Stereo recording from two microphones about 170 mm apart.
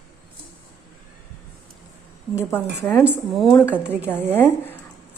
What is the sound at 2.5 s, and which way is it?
A woman's voice, 5° left (ahead or behind).